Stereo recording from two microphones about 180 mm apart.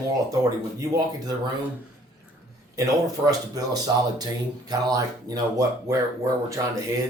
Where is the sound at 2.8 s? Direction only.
20° right (ahead or behind).